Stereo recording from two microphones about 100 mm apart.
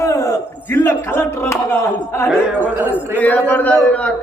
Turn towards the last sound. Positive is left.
turn(degrees=15)  # may be behind; listen again after turning